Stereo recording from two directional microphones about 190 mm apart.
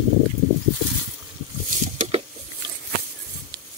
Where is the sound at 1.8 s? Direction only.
35° right (ahead or behind).